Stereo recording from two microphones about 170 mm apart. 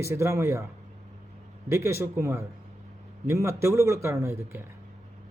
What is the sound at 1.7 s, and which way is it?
Speech, 15° right (ahead or behind).